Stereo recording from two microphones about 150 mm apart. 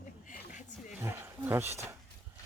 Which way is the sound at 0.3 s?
60° left (ahead or behind).